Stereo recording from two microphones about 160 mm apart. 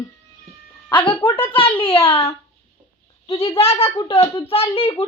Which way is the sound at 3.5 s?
40° left (ahead or behind).